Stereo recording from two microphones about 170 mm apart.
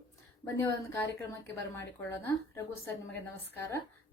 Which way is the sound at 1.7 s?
15° left (ahead or behind).